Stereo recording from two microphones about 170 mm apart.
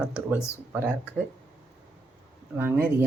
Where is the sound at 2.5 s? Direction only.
15° right (ahead or behind).